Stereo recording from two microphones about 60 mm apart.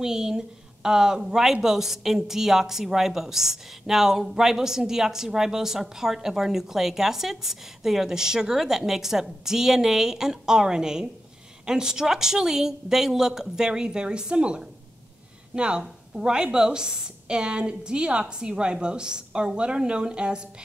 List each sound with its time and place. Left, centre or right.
0.0 s a woman's voice: centre